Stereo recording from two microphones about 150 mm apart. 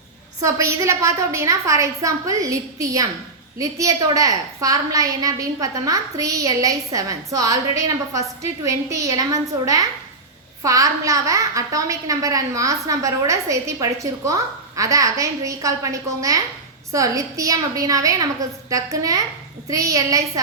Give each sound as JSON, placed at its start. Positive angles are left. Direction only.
{"t": 0.4, "sound": "a woman's voice", "side_deg": -20}